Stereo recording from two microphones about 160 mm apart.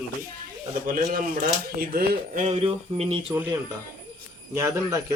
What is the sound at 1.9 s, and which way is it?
Speech, 65° right (ahead or behind).